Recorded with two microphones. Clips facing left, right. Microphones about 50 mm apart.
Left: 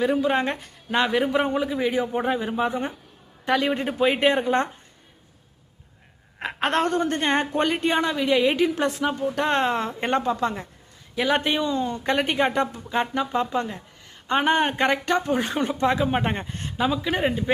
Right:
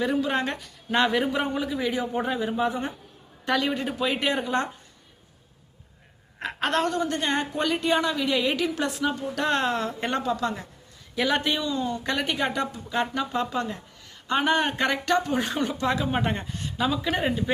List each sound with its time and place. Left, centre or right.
0.0 s speech: centre
0.9 s speech: centre
1.3 s speech: left
3.4 s a man's voice: centre
3.8 s speech: left
6.4 s a woman's voice: centre
6.7 s a woman's voice: left
16.9 s speech: centre